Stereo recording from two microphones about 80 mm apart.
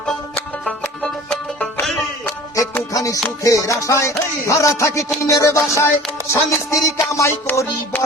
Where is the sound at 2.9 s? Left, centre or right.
Left.